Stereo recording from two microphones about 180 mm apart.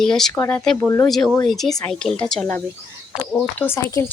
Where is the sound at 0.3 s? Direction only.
10° left (ahead or behind).